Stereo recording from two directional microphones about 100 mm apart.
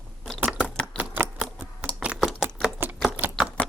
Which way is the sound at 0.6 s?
10° left (ahead or behind).